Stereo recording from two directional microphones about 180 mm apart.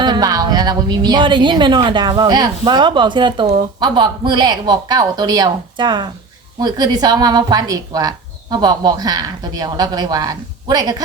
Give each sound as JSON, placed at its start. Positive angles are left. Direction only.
{"t": 0.0, "sound": "a woman's voice", "side_deg": -25}